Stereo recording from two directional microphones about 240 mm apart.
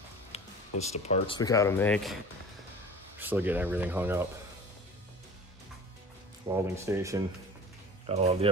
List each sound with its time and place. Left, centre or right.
0.3 s music: left
1.0 s speech: left; by 2.1 s centre
3.2 s speech: centre
6.4 s speech: centre
8.1 s speech: right